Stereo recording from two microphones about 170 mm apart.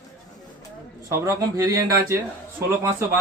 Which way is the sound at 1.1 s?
20° right (ahead or behind).